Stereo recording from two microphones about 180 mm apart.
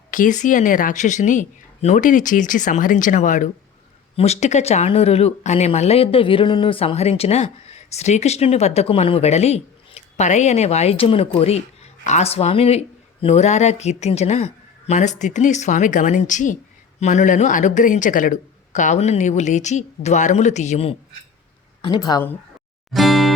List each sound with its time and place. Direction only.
0.1 s speech: 45° left (ahead or behind)
21.8 s speech: 25° left (ahead or behind)
22.9 s music: centre (ahead or behind)